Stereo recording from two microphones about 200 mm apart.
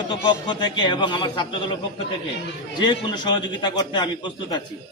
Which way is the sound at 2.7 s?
20° left (ahead or behind).